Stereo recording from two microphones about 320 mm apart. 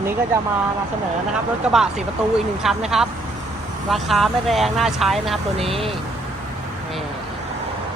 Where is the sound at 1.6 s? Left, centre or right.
Centre.